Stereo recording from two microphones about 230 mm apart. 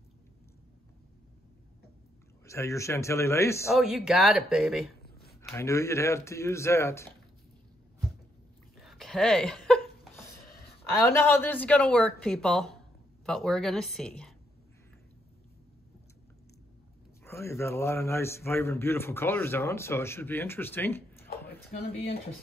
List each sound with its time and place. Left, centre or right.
2.4 s a man's voice: centre
3.7 s speech: centre
5.0 s a sound: left
5.5 s a man's voice: centre
8.7 s a sound: centre
11.1 s speech: centre
17.2 s a man's voice: centre